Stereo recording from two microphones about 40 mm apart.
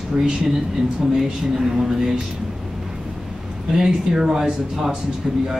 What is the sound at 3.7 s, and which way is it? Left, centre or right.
Speech, centre.